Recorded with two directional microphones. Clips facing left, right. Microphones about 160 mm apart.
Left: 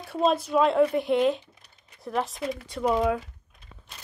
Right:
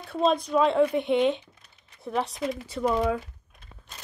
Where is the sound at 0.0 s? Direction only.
5° left (ahead or behind).